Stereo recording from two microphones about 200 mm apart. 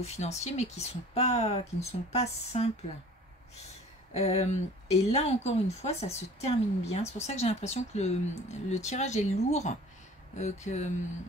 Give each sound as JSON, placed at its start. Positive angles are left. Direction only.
{"t": 0.0, "sound": "speech", "side_deg": 35}
{"t": 4.1, "sound": "speech", "side_deg": 30}